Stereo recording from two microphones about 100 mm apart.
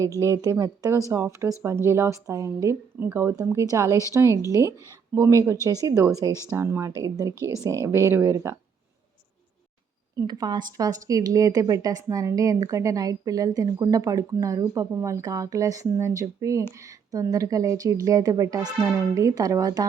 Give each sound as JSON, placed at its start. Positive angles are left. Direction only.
{"t": 0.0, "sound": "a woman's voice", "side_deg": -35}
{"t": 10.2, "sound": "speech", "side_deg": -45}